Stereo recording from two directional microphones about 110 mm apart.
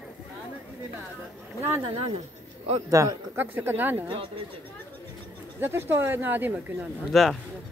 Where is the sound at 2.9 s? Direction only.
30° right (ahead or behind).